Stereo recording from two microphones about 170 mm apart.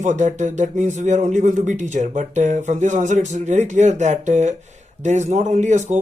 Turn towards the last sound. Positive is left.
turn(degrees=-45)  # may be behind; listen again after turning